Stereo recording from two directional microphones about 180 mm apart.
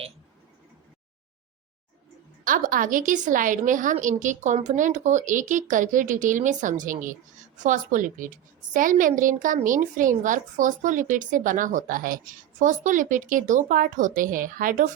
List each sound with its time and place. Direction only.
2.4 s a woman's voice: 50° right (ahead or behind)